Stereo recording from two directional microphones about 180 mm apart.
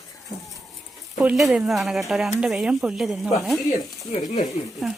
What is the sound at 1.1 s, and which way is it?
Speech, centre (ahead or behind).